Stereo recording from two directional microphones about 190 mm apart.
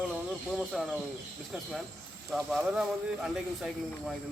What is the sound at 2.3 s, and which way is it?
A woman's voice, centre (ahead or behind).